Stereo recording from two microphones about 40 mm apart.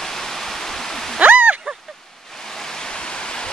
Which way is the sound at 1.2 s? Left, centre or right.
Right.